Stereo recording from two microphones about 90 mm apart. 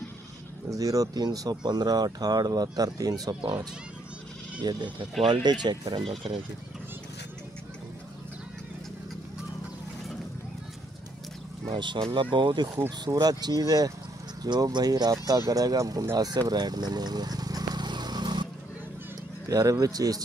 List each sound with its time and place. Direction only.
0.7 s speech: 40° right (ahead or behind)
4.6 s speech: 60° right (ahead or behind)
11.7 s speech: 60° right (ahead or behind)
13.0 s speech: 45° right (ahead or behind)
19.5 s speech: 40° right (ahead or behind)